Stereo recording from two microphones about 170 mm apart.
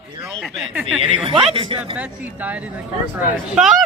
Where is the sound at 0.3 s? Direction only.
Centre (ahead or behind).